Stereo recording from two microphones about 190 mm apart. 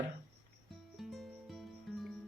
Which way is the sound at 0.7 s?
Centre (ahead or behind).